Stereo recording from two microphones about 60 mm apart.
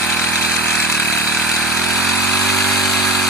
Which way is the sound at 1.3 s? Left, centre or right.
Centre.